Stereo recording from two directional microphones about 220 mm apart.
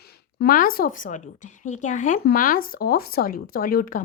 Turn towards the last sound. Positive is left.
turn(degrees=40)  # may be behind; listen again after turning